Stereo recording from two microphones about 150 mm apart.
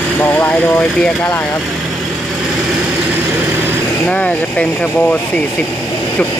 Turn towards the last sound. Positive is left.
turn(degrees=10)  # may be behind; listen again after turning